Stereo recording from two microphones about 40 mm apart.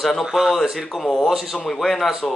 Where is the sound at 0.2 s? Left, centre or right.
Centre.